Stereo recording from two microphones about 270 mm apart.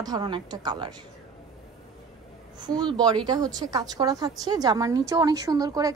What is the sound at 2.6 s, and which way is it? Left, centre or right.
A woman's voice, centre.